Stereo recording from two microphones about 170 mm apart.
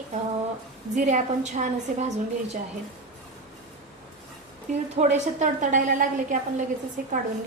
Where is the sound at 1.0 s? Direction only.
45° right (ahead or behind).